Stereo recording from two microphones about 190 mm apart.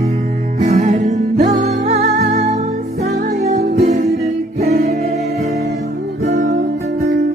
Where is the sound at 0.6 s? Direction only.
35° right (ahead or behind).